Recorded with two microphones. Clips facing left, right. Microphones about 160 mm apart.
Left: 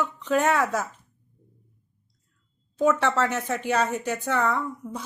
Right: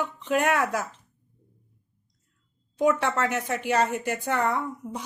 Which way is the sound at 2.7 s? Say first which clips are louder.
Left 1 dB; 15° right (ahead or behind).